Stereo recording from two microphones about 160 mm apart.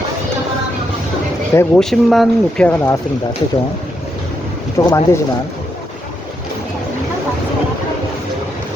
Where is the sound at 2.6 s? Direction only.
15° left (ahead or behind).